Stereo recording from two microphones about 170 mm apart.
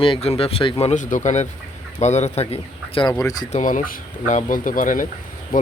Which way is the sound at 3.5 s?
50° left (ahead or behind).